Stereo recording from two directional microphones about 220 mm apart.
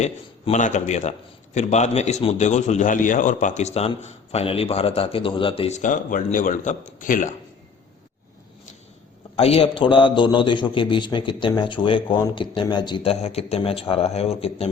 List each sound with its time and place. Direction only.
0.0 s a man's voice: 30° left (ahead or behind)
9.3 s a man's voice: 25° left (ahead or behind)